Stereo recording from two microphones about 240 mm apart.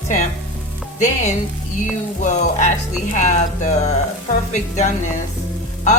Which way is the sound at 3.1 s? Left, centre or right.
Left.